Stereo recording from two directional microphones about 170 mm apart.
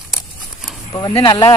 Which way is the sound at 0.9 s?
20° left (ahead or behind).